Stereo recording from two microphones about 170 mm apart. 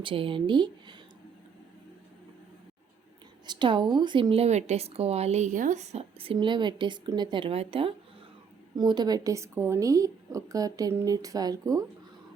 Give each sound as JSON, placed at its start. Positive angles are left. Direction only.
{"t": 0.0, "sound": "a woman's voice", "side_deg": -30}
{"t": 3.4, "sound": "a woman's voice", "side_deg": -25}